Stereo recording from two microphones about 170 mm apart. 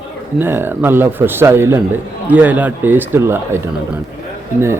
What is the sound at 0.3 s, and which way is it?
Speech, 15° right (ahead or behind).